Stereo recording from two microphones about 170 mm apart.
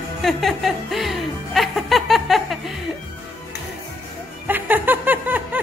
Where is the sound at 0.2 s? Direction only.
Centre (ahead or behind).